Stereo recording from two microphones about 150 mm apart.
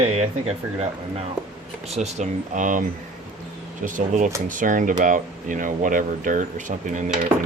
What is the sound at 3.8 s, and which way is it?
Speech, 60° right (ahead or behind).